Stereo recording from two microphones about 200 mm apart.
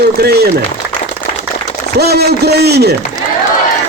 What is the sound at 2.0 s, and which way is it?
Speech, 55° right (ahead or behind).